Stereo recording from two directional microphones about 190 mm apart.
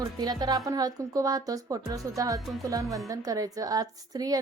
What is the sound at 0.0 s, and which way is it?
A woman's voice, 20° right (ahead or behind).